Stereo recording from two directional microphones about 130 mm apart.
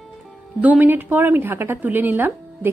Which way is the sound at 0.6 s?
15° right (ahead or behind).